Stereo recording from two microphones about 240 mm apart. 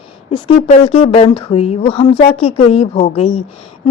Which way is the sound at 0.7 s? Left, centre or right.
Left.